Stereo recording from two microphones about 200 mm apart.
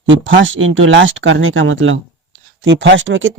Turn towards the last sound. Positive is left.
turn(degrees=-70)  # may be behind; listen again after turning